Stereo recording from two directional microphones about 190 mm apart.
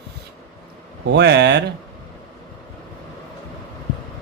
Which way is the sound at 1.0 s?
70° right (ahead or behind).